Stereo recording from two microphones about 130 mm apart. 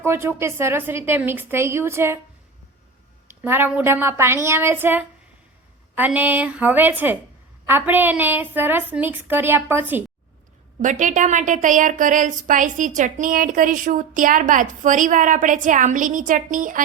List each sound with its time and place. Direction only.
0.0 s a woman's voice: 20° right (ahead or behind)
3.2 s a woman's voice: 15° right (ahead or behind)
10.8 s a woman's voice: 75° right (ahead or behind); by 16.8 s 90° right